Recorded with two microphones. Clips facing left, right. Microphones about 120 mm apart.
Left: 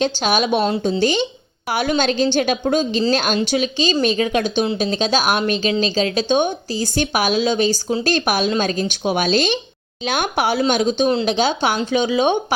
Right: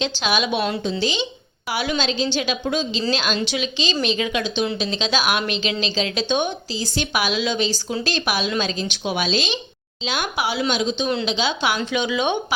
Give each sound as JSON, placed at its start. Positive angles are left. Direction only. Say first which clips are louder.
{"t": 0.0, "sound": "a woman's voice", "louder": "left 4 dB", "side_deg": 45}